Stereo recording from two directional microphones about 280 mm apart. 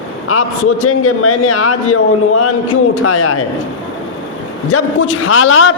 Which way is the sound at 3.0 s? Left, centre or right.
Left.